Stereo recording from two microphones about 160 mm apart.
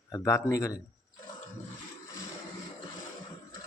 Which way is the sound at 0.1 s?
15° left (ahead or behind).